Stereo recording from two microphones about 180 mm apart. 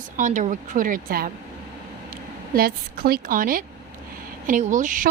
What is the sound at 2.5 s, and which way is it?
A woman's voice, 55° right (ahead or behind).